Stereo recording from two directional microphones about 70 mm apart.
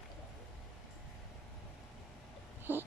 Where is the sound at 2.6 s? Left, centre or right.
Right.